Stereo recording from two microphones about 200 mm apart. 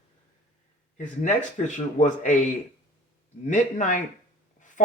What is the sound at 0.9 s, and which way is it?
Speech, 40° left (ahead or behind).